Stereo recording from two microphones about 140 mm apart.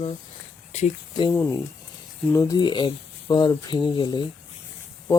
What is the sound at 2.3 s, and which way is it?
Speech, 20° left (ahead or behind).